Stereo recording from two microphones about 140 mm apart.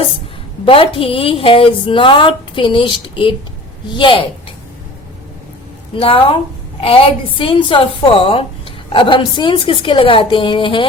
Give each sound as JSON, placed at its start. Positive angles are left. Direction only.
{"t": 0.6, "sound": "a woman's voice", "side_deg": 40}
{"t": 5.9, "sound": "a woman's voice", "side_deg": 40}